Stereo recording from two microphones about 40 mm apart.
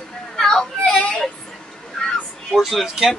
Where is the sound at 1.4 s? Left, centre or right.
Centre.